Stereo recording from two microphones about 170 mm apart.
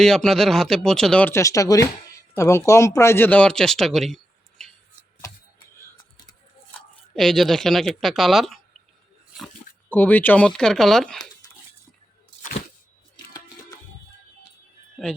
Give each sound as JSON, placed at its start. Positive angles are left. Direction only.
{"t": 0.0, "sound": "speech", "side_deg": 5}
{"t": 6.7, "sound": "speech", "side_deg": 5}
{"t": 9.9, "sound": "speech", "side_deg": 10}
{"t": 13.1, "sound": "a sound", "side_deg": 20}